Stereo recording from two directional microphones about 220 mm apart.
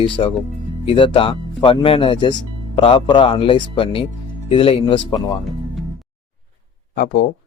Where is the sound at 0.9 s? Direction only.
25° left (ahead or behind).